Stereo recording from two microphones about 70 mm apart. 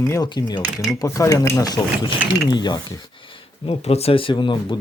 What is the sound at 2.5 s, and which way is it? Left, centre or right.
Speech, left.